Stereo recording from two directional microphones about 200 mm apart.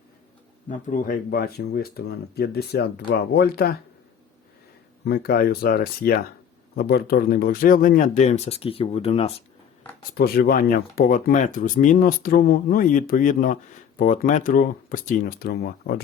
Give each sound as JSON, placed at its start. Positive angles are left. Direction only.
{"t": 0.7, "sound": "speech", "side_deg": 40}
{"t": 5.0, "sound": "speech", "side_deg": 50}
{"t": 10.2, "sound": "speech", "side_deg": 50}